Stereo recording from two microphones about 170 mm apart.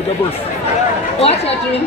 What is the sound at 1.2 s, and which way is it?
Speech, 35° left (ahead or behind).